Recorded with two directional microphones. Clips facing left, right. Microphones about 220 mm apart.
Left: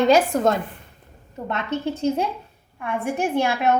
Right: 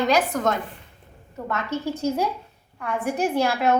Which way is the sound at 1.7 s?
25° left (ahead or behind).